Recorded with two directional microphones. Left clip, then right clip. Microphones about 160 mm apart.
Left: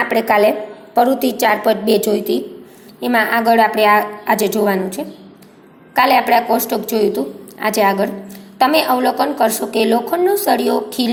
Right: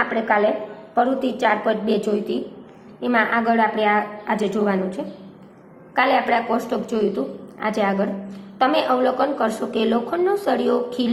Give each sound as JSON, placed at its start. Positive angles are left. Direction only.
{"t": 0.9, "sound": "a woman's voice", "side_deg": 30}